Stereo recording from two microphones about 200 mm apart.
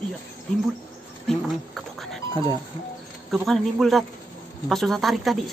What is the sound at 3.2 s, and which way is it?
Speech, centre (ahead or behind).